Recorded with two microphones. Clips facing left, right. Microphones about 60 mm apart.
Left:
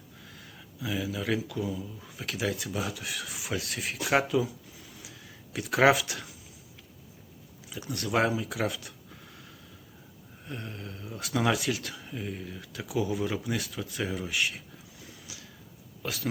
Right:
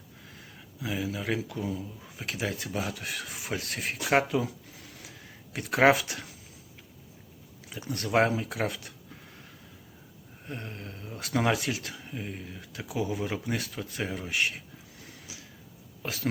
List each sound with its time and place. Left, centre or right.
0.3 s speech: right
5.0 s a sound: right
7.7 s speech: right
10.4 s speech: right
15.3 s a sound: right
16.0 s speech: right